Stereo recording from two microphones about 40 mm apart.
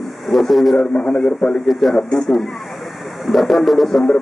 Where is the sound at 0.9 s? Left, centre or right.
Left.